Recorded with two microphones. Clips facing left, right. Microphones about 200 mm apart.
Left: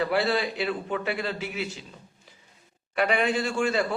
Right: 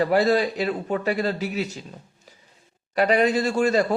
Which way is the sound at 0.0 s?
40° right (ahead or behind).